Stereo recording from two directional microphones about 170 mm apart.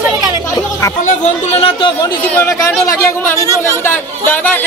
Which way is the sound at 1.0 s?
40° left (ahead or behind).